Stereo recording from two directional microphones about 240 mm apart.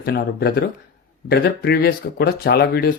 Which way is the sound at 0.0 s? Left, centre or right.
Left.